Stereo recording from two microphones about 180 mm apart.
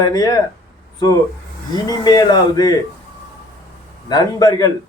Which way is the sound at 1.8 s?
20° left (ahead or behind).